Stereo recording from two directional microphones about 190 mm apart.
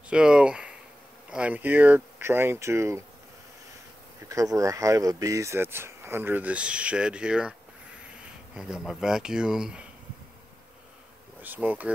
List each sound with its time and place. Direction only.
0.1 s a sound: 5° right (ahead or behind)
1.3 s speech: 5° right (ahead or behind)
4.3 s speech: 15° right (ahead or behind)
8.5 s speech: 5° right (ahead or behind)
11.4 s speech: 10° right (ahead or behind)